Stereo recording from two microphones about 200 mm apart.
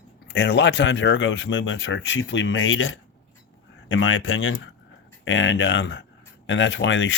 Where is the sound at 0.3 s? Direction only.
60° left (ahead or behind).